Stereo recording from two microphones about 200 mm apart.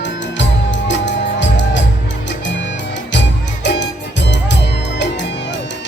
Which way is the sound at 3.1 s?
60° left (ahead or behind).